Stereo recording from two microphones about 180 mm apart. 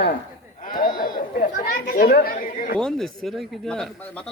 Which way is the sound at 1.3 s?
55° left (ahead or behind).